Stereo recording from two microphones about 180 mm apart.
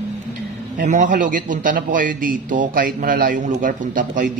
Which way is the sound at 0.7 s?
45° right (ahead or behind).